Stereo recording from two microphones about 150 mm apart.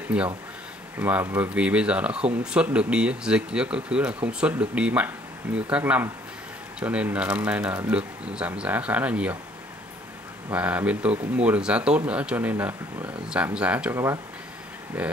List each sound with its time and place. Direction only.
0.1 s speech: 5° right (ahead or behind)
10.5 s speech: 10° right (ahead or behind)
13.9 s speech: 20° right (ahead or behind)
14.9 s speech: 10° right (ahead or behind)